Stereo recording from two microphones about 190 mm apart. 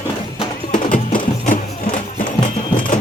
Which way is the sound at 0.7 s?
45° left (ahead or behind).